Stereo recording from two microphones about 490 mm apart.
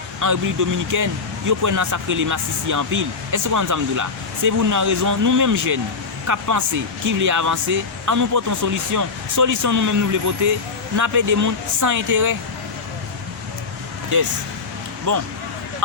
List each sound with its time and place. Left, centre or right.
0.2 s speech: right
15.1 s speech: right